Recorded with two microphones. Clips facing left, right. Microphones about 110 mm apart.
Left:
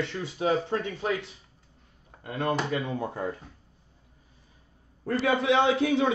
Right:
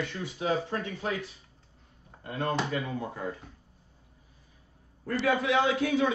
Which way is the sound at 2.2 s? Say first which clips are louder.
Left 2 dB; 20° left (ahead or behind).